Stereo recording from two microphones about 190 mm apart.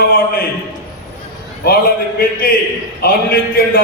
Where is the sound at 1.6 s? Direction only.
55° left (ahead or behind).